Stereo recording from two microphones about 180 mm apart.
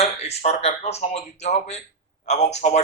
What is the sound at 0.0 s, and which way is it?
Speech, 35° left (ahead or behind).